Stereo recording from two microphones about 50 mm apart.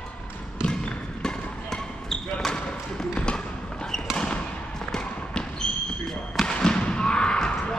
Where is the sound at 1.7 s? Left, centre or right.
Centre.